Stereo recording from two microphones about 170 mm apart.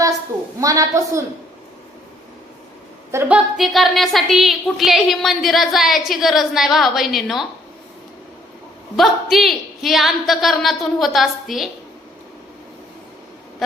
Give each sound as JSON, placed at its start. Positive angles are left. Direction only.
{"t": 0.6, "sound": "a woman's voice", "side_deg": -20}
{"t": 3.1, "sound": "a woman's voice", "side_deg": -10}
{"t": 9.0, "sound": "a woman's voice", "side_deg": 0}